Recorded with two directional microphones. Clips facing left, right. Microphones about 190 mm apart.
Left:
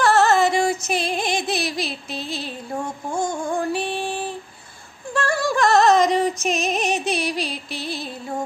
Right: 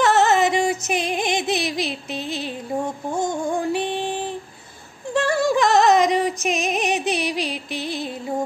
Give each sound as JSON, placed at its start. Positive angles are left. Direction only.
{"t": 0.0, "sound": "a sound", "side_deg": -20}
{"t": 3.1, "sound": "female singing", "side_deg": -20}
{"t": 5.1, "sound": "music", "side_deg": -20}